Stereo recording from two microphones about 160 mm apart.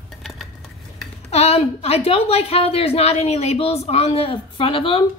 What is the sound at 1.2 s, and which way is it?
Speech, 40° left (ahead or behind).